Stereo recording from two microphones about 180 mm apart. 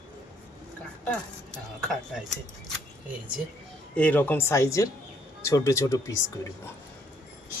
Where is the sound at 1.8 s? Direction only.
Centre (ahead or behind).